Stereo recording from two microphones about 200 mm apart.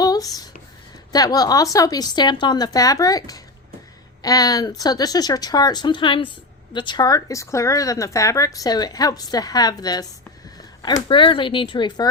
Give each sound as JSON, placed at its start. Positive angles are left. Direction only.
{"t": 0.0, "sound": "a sound", "side_deg": 20}
{"t": 1.1, "sound": "a woman's voice", "side_deg": 20}
{"t": 11.1, "sound": "a woman's voice", "side_deg": 25}